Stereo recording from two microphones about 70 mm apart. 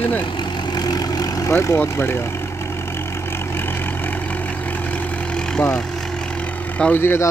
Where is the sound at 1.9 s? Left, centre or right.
Left.